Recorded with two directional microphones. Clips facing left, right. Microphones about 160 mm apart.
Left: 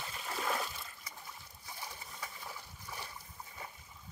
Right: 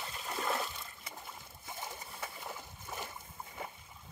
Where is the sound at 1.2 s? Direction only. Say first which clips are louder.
Right 3 dB; 25° right (ahead or behind).